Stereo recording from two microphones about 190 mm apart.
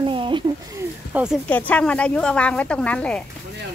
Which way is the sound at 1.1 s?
10° right (ahead or behind).